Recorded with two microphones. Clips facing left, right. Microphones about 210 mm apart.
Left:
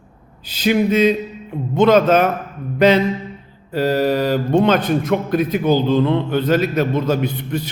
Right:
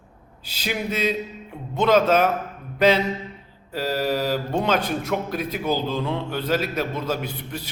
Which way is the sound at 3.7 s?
5° right (ahead or behind).